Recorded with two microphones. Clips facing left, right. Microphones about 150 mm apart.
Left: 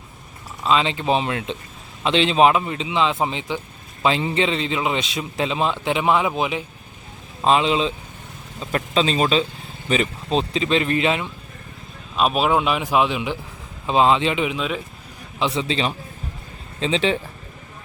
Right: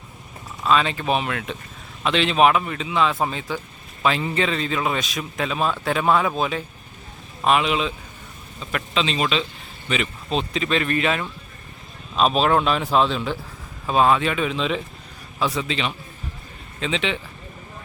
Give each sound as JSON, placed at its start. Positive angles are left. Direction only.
{"t": 0.6, "sound": "a man's voice", "side_deg": 20}
{"t": 7.4, "sound": "a man's voice", "side_deg": 25}
{"t": 8.7, "sound": "speech", "side_deg": 40}
{"t": 10.3, "sound": "a man's voice", "side_deg": 30}
{"t": 12.1, "sound": "a man's voice", "side_deg": 10}
{"t": 14.5, "sound": "speech", "side_deg": 5}
{"t": 15.4, "sound": "speech", "side_deg": 25}